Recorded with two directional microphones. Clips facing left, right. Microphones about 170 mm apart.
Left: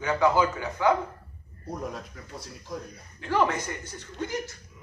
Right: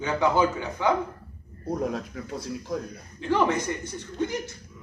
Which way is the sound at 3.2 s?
15° right (ahead or behind).